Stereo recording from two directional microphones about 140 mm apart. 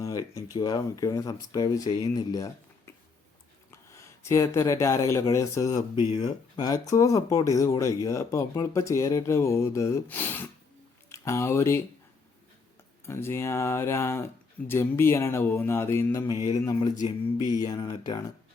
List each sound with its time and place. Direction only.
0.0 s a sound: 25° left (ahead or behind)
0.5 s speech: 30° left (ahead or behind)
13.1 s speech: 20° left (ahead or behind)